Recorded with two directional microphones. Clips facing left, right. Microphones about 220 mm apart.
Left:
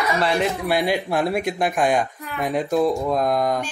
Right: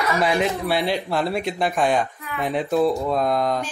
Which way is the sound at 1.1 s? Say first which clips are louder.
Left 2 dB; 15° left (ahead or behind).